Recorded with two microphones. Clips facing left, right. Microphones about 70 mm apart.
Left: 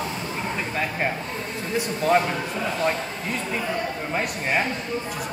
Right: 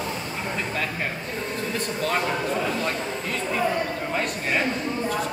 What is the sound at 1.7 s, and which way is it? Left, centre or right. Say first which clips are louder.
Speech: left 7 dB; centre.